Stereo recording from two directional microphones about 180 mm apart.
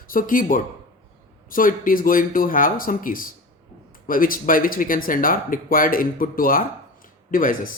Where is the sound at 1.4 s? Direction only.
50° left (ahead or behind).